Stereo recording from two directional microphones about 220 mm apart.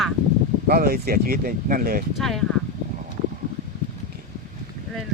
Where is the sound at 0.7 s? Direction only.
45° right (ahead or behind).